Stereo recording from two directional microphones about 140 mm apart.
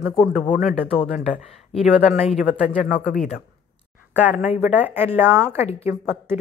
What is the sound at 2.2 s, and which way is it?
Speech, centre (ahead or behind).